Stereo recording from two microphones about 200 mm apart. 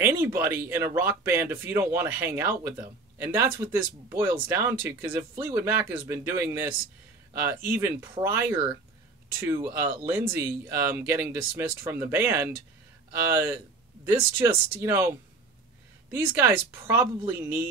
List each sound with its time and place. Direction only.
0.0 s speech: 10° right (ahead or behind)
16.1 s speech: 10° right (ahead or behind)